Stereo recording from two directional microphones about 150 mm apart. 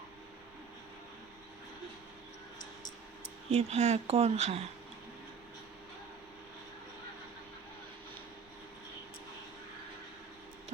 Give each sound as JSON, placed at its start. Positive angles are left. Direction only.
{"t": 3.5, "sound": "speech", "side_deg": -45}